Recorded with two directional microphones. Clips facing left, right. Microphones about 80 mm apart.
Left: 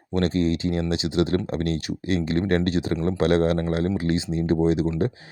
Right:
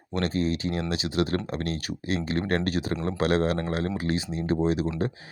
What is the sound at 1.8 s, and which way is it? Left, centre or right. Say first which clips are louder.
Speech: left 4 dB; right.